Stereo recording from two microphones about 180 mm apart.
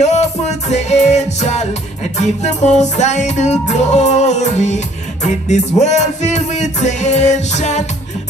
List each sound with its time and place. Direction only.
0.0 s music: 40° left (ahead or behind)